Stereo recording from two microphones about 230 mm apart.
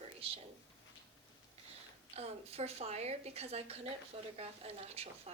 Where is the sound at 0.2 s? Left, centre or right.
Right.